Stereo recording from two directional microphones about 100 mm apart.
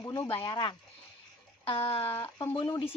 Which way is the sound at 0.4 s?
50° left (ahead or behind).